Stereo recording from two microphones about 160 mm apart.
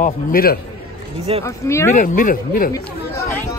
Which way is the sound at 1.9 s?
60° left (ahead or behind).